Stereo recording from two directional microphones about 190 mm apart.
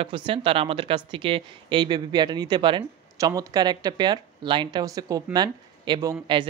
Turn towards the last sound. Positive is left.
turn(degrees=-20)  # may be behind; listen again after turning